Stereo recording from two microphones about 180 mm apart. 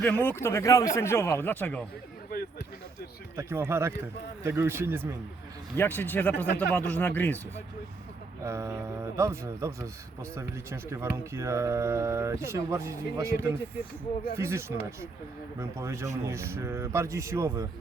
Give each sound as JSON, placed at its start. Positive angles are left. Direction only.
{"t": 0.0, "sound": "speech", "side_deg": 10}
{"t": 3.3, "sound": "speech", "side_deg": -15}
{"t": 5.7, "sound": "speech", "side_deg": 10}
{"t": 8.4, "sound": "speech", "side_deg": -15}